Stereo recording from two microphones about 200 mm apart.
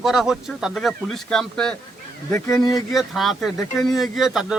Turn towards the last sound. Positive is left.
turn(degrees=0)  # may be behind; listen again after turning